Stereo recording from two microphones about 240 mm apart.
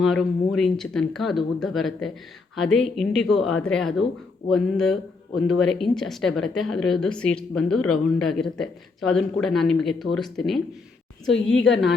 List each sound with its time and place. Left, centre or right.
0.0 s a woman's voice: centre
11.3 s a woman's voice: left